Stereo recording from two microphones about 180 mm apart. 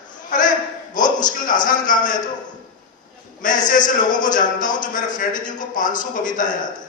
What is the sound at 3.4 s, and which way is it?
A man's voice, 45° left (ahead or behind).